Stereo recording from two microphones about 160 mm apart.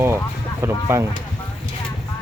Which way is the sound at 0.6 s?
15° right (ahead or behind).